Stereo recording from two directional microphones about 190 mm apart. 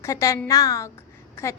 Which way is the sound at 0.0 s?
15° left (ahead or behind).